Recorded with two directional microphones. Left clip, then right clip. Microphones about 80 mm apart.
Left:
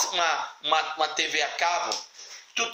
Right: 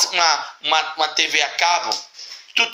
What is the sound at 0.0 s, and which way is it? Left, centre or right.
Speech, left.